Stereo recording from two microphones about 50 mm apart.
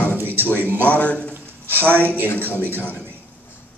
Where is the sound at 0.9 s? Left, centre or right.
Left.